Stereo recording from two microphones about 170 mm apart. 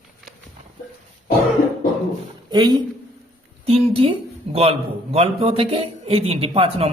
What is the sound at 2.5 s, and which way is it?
Speech, 25° right (ahead or behind).